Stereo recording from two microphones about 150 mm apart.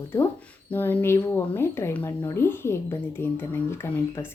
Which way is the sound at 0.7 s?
15° left (ahead or behind).